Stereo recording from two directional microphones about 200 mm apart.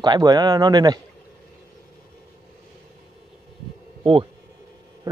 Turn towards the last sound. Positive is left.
turn(degrees=-20)  # may be behind; listen again after turning